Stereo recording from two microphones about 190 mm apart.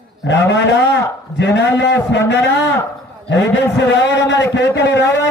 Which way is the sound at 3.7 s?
65° left (ahead or behind).